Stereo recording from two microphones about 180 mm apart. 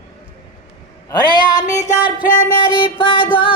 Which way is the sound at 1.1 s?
25° left (ahead or behind).